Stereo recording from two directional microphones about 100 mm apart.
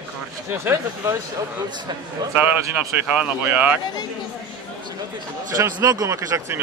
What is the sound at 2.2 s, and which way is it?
Speech, 45° right (ahead or behind).